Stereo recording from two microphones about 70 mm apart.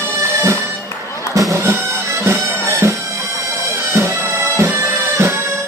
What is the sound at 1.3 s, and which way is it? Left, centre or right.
Music, right.